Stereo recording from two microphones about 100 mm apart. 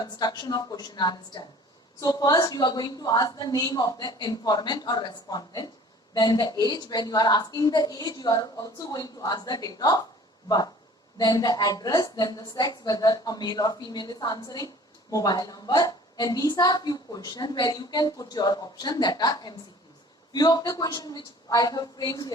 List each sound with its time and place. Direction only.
0.0 s a woman's voice: 40° left (ahead or behind)
11.2 s a woman's voice: 45° left (ahead or behind)